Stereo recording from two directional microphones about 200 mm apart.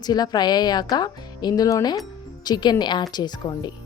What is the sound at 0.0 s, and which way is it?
A woman's voice, 20° left (ahead or behind).